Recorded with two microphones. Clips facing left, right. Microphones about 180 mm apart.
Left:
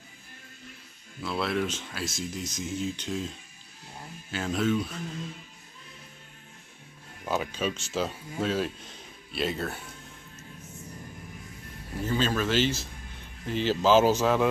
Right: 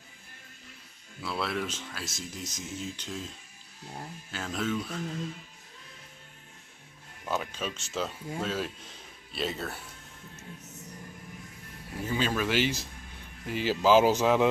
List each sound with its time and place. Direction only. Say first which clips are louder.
1.2 s speech: left 4 dB; centre (ahead or behind)
4.3 s speech: left 5 dB; 5° left (ahead or behind)
7.2 s speech: left 4 dB; 5° left (ahead or behind)
12.0 s speech: left 2 dB; 10° right (ahead or behind)